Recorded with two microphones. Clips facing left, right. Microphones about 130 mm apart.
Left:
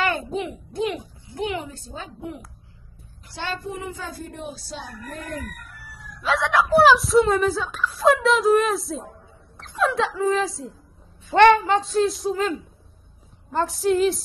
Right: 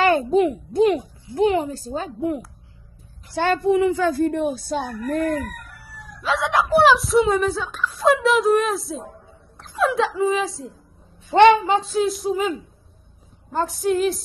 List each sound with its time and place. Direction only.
0.0 s a woman's voice: 35° right (ahead or behind); by 5.3 s 55° right (ahead or behind)
5.9 s chicken: centre (ahead or behind)
6.8 s speech: centre (ahead or behind)
9.6 s a sound: centre (ahead or behind)
10.3 s speech: centre (ahead or behind)
11.3 s speech: 15° right (ahead or behind)
11.7 s speech: centre (ahead or behind)
13.5 s speech: centre (ahead or behind)